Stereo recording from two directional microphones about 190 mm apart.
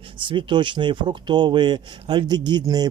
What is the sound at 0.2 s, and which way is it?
Speech, 25° right (ahead or behind).